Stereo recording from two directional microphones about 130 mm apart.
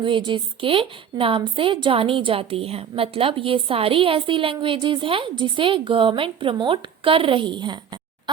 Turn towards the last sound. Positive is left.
turn(degrees=-35)  # may be behind; listen again after turning